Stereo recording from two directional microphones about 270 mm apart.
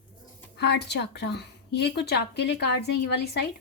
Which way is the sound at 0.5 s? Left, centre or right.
Left.